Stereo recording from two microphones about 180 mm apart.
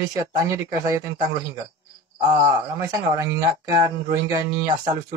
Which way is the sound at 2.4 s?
20° right (ahead or behind).